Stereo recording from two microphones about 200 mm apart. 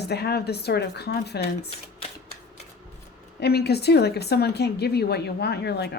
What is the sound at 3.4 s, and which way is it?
Speech, 55° left (ahead or behind).